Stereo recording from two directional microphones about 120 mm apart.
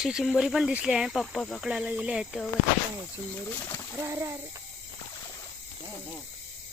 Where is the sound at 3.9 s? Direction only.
25° right (ahead or behind).